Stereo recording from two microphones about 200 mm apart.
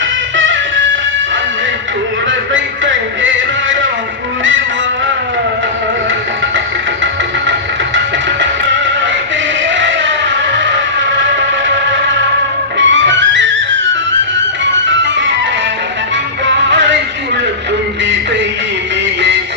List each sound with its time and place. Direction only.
0.3 s music: 70° right (ahead or behind)
2.5 s music: 70° right (ahead or behind)
7.9 s music: 65° right (ahead or behind)
9.6 s a sound: 65° right (ahead or behind)
12.7 s music: 65° right (ahead or behind)
18.0 s music: 65° right (ahead or behind)